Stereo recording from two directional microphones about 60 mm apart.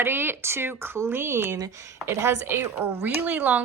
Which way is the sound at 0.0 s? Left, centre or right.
Right.